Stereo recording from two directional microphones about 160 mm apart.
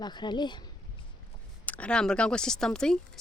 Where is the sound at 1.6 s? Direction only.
10° left (ahead or behind).